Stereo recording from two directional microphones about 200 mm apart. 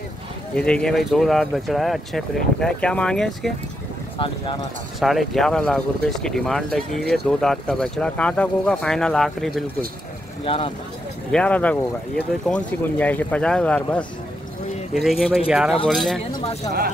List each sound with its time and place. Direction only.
0.6 s speech: 5° left (ahead or behind)
5.0 s speech: centre (ahead or behind)
10.4 s speech: 25° left (ahead or behind)
11.3 s speech: 5° left (ahead or behind)
16.3 s speech: 20° left (ahead or behind)